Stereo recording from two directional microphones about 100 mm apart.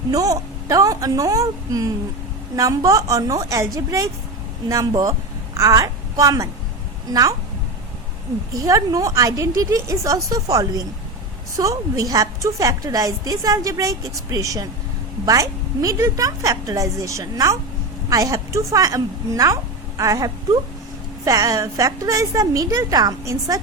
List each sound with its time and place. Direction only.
0.1 s a woman's voice: 35° right (ahead or behind)
8.5 s a woman's voice: 35° right (ahead or behind)